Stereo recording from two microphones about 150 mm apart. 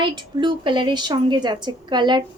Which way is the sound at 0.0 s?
30° right (ahead or behind).